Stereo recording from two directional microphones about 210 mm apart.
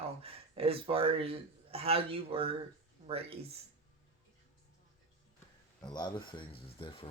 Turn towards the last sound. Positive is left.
turn(degrees=25)  # may be behind; listen again after turning